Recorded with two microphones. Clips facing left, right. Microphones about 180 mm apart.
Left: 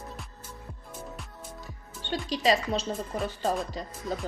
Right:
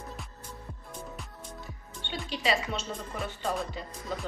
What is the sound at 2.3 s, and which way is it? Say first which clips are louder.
Speech: left 4 dB; 40° left (ahead or behind).